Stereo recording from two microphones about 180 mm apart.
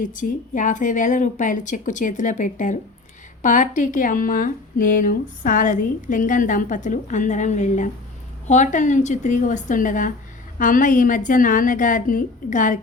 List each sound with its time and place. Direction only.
0.0 s a woman's voice: 45° left (ahead or behind)